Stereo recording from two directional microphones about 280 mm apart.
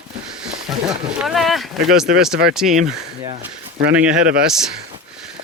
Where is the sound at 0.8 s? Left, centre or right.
Centre.